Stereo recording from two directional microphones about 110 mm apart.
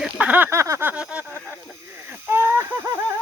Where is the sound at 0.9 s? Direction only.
10° right (ahead or behind).